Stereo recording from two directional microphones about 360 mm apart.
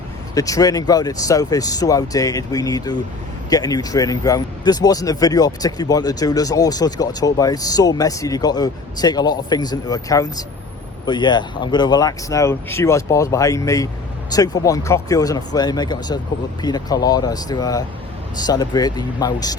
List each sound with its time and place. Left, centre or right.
0.3 s speech: centre